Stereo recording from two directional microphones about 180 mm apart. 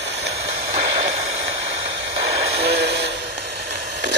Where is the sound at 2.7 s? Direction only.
65° right (ahead or behind).